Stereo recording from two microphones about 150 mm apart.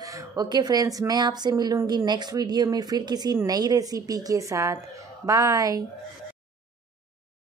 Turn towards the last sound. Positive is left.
turn(degrees=-20)  # may be behind; listen again after turning